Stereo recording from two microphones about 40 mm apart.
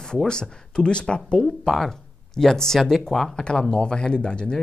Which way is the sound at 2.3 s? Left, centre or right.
Centre.